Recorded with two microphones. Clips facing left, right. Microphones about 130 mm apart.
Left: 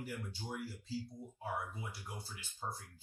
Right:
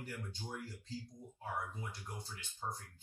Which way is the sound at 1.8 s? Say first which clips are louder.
Even; 10° left (ahead or behind).